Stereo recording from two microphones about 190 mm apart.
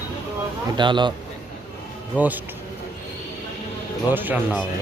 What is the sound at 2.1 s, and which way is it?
Speech, 10° right (ahead or behind).